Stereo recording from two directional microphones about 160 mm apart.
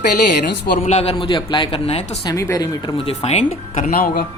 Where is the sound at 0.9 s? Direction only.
40° left (ahead or behind).